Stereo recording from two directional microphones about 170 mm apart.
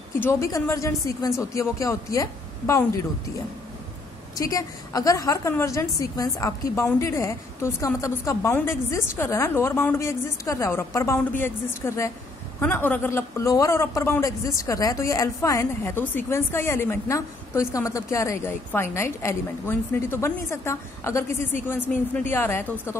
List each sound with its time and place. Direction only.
0.2 s a man's voice: 15° left (ahead or behind)
4.4 s a man's voice: 20° left (ahead or behind)